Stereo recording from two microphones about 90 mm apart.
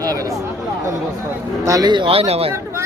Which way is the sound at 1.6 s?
40° right (ahead or behind).